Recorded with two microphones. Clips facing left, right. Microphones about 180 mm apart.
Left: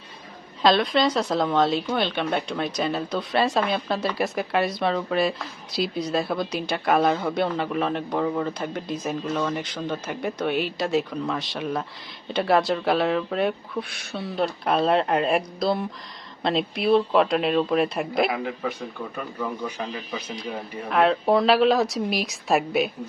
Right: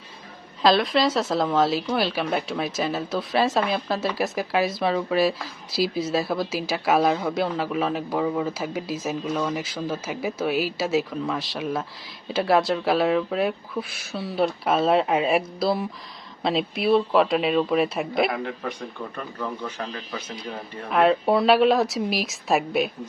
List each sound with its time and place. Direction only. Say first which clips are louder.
0.6 s speech: even; centre (ahead or behind)
20.9 s speech: even; centre (ahead or behind)